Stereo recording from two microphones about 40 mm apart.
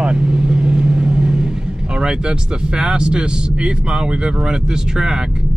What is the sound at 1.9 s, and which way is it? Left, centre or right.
Speech, right.